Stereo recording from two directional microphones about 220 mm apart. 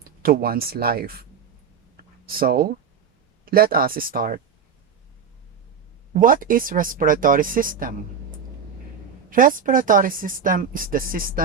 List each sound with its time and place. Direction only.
0.0 s speech: 40° right (ahead or behind)
2.0 s a sound: 40° right (ahead or behind)
3.4 s speech: 40° right (ahead or behind)
6.1 s speech: 40° right (ahead or behind)
9.3 s speech: 40° right (ahead or behind)